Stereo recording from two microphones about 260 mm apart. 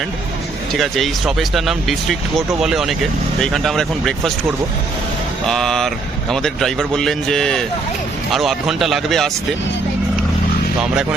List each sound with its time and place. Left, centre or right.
0.7 s speech: centre
5.5 s speech: centre